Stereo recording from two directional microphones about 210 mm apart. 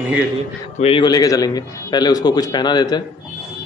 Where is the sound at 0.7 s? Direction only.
25° left (ahead or behind).